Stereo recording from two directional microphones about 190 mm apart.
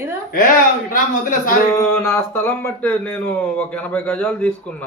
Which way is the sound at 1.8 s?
15° left (ahead or behind).